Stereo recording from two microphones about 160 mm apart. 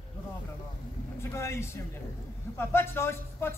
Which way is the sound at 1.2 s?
15° left (ahead or behind).